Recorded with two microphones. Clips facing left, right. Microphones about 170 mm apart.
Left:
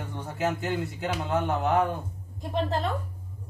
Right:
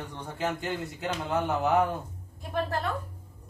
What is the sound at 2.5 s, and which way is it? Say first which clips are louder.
Speech: left 2 dB; 20° left (ahead or behind).